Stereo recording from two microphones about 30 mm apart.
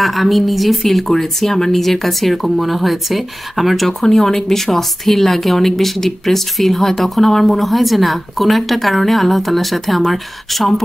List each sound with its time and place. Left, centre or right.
0.0 s speech: centre
3.8 s speech: centre